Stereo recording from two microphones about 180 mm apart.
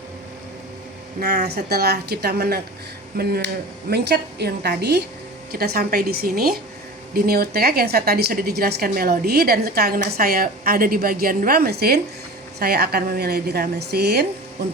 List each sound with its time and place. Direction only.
1.2 s a woman's voice: 65° right (ahead or behind)